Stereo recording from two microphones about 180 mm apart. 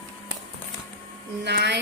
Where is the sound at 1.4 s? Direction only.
65° right (ahead or behind).